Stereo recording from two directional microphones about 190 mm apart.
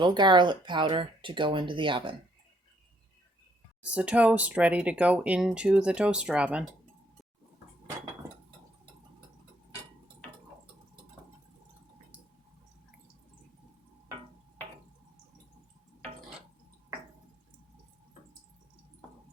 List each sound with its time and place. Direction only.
0.0 s speech: 25° right (ahead or behind)
3.8 s speech: 5° right (ahead or behind)